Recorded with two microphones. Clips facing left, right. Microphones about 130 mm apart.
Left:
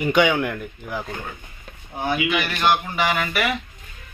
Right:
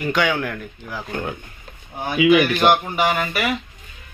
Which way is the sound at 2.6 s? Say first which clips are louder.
Right 3 dB; 20° right (ahead or behind).